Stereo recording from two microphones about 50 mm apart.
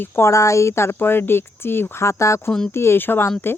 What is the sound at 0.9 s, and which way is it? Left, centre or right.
Speech, left.